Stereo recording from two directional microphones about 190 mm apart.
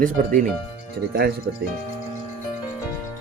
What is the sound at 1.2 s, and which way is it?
Speech, 55° right (ahead or behind).